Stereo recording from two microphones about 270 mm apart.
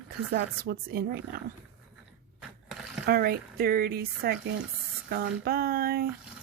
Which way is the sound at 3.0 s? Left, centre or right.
Right.